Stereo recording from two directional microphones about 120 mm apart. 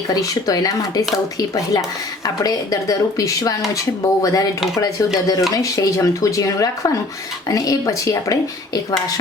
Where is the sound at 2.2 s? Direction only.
30° left (ahead or behind).